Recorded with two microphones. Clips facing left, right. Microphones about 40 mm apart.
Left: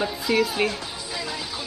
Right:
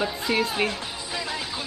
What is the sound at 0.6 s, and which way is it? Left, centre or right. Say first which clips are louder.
Music: left 1 dB; right.